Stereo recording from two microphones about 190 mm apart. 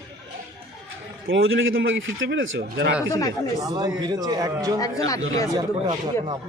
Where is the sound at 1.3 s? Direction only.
90° right; by 2.9 s 70° right (ahead or behind).